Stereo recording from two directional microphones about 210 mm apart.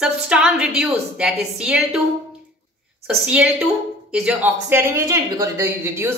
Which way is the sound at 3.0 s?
5° right (ahead or behind).